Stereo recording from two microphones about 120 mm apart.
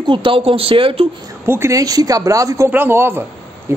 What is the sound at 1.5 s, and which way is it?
Speech, 25° right (ahead or behind).